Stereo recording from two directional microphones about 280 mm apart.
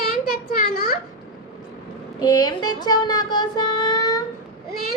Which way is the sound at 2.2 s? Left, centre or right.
Centre.